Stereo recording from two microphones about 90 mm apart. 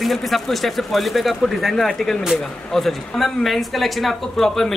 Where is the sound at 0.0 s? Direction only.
Centre (ahead or behind).